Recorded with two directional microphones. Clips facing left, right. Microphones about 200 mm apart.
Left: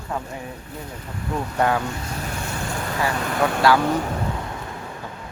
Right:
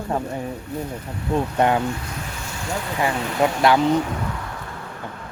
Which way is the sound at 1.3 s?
20° right (ahead or behind).